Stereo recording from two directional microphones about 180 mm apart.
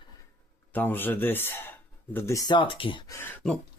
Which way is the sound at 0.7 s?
10° left (ahead or behind).